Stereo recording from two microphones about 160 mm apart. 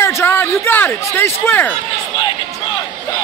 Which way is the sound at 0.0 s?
15° left (ahead or behind).